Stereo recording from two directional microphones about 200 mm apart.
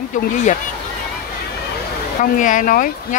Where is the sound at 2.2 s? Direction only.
40° left (ahead or behind).